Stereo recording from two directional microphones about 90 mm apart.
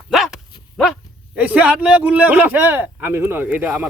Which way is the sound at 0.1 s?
Centre (ahead or behind).